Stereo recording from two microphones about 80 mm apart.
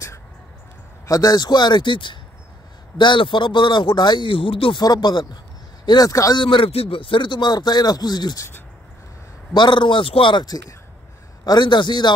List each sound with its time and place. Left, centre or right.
1.0 s speech: left
4.8 s speech: left
6.3 s speech: left
8.4 s speech: left
9.5 s speech: left